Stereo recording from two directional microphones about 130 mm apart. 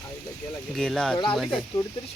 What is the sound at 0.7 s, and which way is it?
Speech, 5° left (ahead or behind).